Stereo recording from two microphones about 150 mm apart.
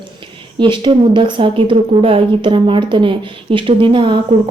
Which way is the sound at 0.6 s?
35° right (ahead or behind).